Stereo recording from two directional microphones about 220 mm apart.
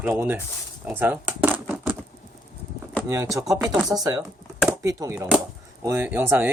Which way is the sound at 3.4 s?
15° right (ahead or behind).